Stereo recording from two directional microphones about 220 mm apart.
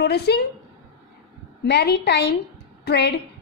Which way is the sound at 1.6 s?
50° left (ahead or behind).